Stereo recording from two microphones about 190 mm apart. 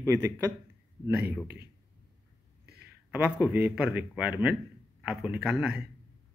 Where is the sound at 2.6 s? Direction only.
55° right (ahead or behind).